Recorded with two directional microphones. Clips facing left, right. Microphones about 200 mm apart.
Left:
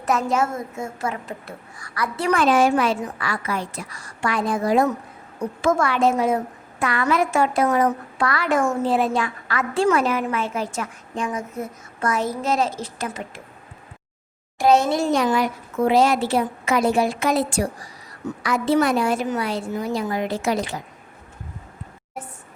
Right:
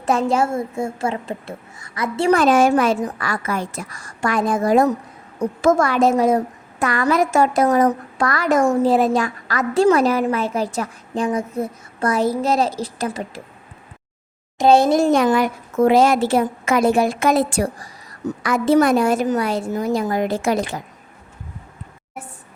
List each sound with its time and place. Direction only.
0.0 s speech: 30° right (ahead or behind)
2.3 s a woman's voice: 45° right (ahead or behind)
14.6 s speech: 30° right (ahead or behind)
14.8 s a woman's voice: 50° right (ahead or behind)